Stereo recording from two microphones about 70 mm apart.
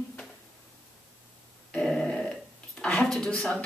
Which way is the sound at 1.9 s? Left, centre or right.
Centre.